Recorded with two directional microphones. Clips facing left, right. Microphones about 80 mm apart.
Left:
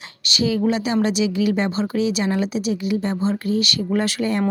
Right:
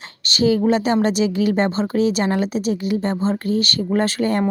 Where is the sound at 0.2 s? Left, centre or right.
Right.